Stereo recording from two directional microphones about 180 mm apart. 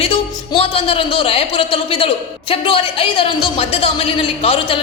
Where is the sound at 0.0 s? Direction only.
35° left (ahead or behind).